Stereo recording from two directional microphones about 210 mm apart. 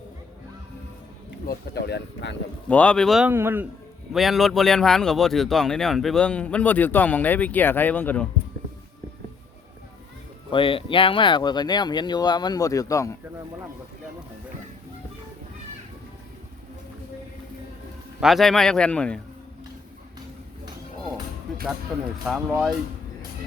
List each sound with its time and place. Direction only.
1.5 s speech: 50° left (ahead or behind)
2.6 s speech: 5° left (ahead or behind)
10.5 s speech: 25° left (ahead or behind)
18.2 s speech: centre (ahead or behind)
22.3 s speech: 5° right (ahead or behind)